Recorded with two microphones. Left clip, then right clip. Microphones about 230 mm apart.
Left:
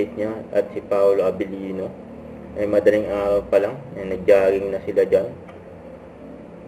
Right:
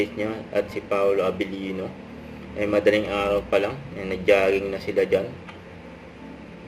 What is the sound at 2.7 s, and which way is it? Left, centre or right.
A man's voice, right.